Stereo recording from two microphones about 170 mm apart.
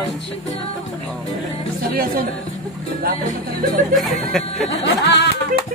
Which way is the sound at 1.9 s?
60° right (ahead or behind).